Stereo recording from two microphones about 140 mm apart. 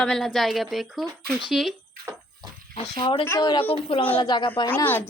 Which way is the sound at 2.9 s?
35° left (ahead or behind).